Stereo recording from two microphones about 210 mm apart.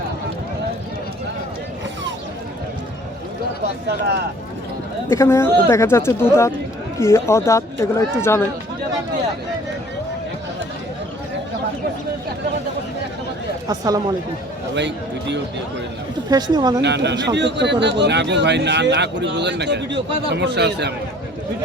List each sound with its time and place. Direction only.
5.0 s speech: 10° left (ahead or behind)
13.7 s speech: 15° right (ahead or behind)
14.8 s speech: 55° right (ahead or behind)
16.3 s speech: 20° right (ahead or behind)
16.8 s speech: 55° right (ahead or behind)